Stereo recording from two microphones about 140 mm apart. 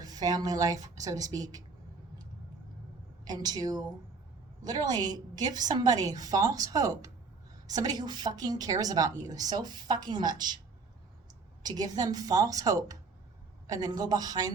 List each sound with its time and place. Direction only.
0.0 s a woman's voice: 25° right (ahead or behind)
3.2 s a woman's voice: 30° right (ahead or behind)
11.6 s a woman's voice: 30° right (ahead or behind)